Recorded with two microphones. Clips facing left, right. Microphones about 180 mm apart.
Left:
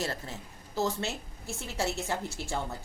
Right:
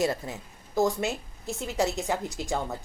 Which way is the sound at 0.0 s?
15° right (ahead or behind).